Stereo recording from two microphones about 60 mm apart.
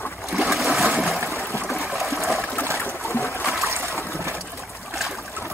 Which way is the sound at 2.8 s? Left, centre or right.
Left.